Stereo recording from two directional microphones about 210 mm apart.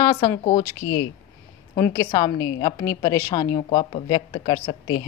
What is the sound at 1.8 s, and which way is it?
A woman's voice, 15° left (ahead or behind).